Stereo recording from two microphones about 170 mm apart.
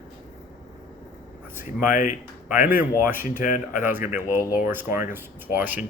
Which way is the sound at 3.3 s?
50° left (ahead or behind).